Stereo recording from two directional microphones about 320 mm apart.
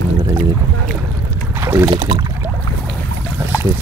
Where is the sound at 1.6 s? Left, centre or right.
Centre.